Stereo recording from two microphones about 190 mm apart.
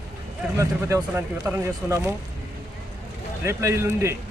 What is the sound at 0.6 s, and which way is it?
Speech, 15° right (ahead or behind).